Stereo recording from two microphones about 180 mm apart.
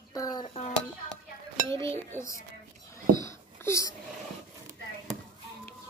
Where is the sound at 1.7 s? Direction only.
15° left (ahead or behind).